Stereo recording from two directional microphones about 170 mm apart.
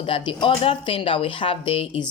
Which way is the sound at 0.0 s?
30° left (ahead or behind).